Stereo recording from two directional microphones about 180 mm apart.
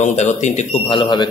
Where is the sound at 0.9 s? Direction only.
25° left (ahead or behind).